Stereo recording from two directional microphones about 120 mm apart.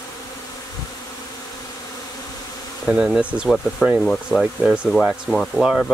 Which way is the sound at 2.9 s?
5° right (ahead or behind).